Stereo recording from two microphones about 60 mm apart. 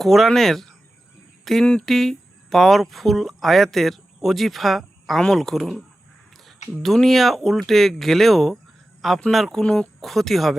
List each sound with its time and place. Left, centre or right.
0.0 s speech: centre
6.8 s speech: centre
9.0 s a sound: centre
9.3 s speech: centre
9.6 s speech: centre
10.0 s speech: centre